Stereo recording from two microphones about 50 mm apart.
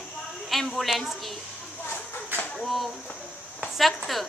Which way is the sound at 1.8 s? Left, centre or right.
Left.